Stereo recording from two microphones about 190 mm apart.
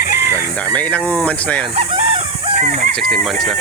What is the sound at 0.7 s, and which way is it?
Speech, 5° left (ahead or behind).